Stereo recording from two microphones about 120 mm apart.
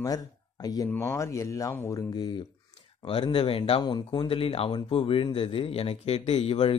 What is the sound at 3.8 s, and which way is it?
Speech, 35° left (ahead or behind).